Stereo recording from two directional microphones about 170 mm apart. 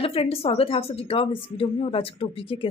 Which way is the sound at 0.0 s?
35° left (ahead or behind).